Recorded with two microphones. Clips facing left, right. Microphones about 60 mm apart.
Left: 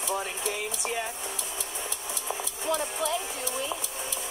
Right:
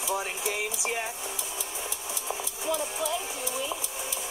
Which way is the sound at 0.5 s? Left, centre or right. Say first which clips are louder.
Right 3 dB; right.